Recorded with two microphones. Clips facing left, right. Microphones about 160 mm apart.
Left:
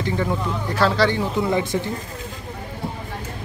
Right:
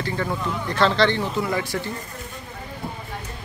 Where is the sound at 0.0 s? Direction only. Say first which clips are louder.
Left 3 dB; 15° left (ahead or behind).